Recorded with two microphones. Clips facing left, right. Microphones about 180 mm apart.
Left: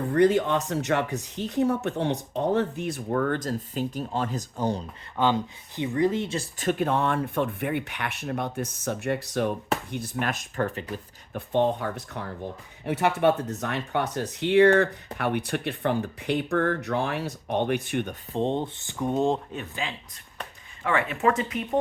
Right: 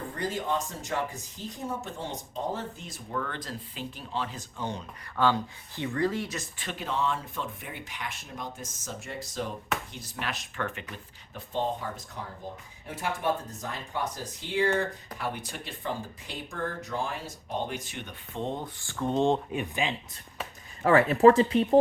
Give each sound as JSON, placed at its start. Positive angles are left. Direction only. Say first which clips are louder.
{"t": 0.1, "sound": "speech", "louder": "left 11 dB", "side_deg": 65}
{"t": 5.1, "sound": "speech", "louder": "left 2 dB", "side_deg": 20}
{"t": 6.6, "sound": "speech", "louder": "left 7 dB", "side_deg": 50}
{"t": 9.9, "sound": "speech", "louder": "left 7 dB", "side_deg": 55}
{"t": 11.3, "sound": "speech", "louder": "left 7 dB", "side_deg": 65}
{"t": 18.3, "sound": "speech", "louder": "left 7 dB", "side_deg": 30}
{"t": 19.5, "sound": "speech", "louder": "right 3 dB", "side_deg": -15}
{"t": 20.8, "sound": "speech", "louder": "right 6 dB", "side_deg": -40}